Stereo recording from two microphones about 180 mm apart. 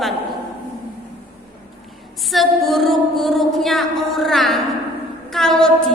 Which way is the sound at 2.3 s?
Centre (ahead or behind).